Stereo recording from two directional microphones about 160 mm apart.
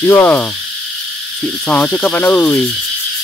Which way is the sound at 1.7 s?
10° left (ahead or behind).